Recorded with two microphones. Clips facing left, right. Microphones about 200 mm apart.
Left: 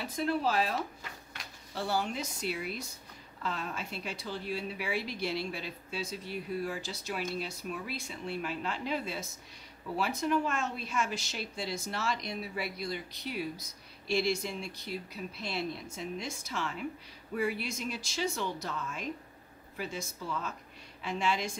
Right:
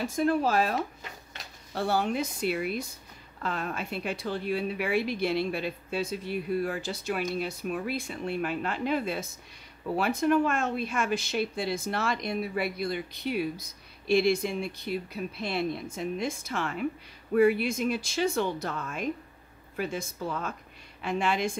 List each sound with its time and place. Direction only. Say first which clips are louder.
0.0 s speech: right 5 dB; 45° right (ahead or behind)